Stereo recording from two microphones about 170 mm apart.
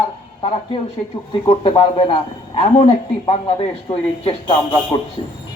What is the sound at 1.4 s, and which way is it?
Speech, 35° left (ahead or behind).